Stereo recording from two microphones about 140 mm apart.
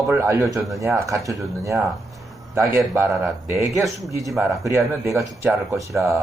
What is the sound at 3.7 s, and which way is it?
Speech, centre (ahead or behind).